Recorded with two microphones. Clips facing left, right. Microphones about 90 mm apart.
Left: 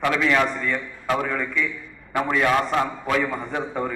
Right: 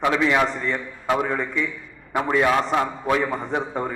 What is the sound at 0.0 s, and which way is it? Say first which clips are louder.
A man's voice: right 1 dB; 20° right (ahead or behind).